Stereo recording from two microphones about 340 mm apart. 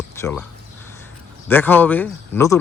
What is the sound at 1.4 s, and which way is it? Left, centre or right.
Speech, centre.